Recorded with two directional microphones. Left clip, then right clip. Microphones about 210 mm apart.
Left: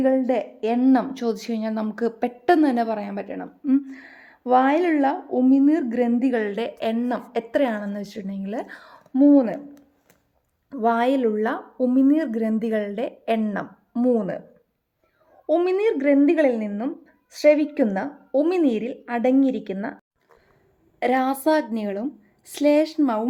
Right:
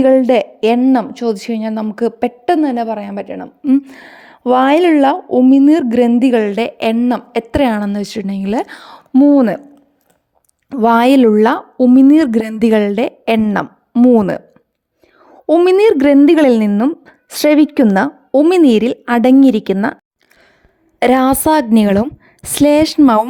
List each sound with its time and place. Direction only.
0.0 s a woman's voice: 40° right (ahead or behind)
0.8 s a woman's voice: 30° right (ahead or behind); by 9.6 s 50° right (ahead or behind)
10.7 s a woman's voice: 50° right (ahead or behind)
21.0 s a woman's voice: 50° right (ahead or behind)